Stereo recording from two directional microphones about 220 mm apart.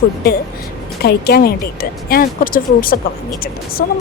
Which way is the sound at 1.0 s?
45° left (ahead or behind).